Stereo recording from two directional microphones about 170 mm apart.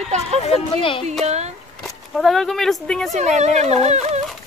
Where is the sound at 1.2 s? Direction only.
40° right (ahead or behind).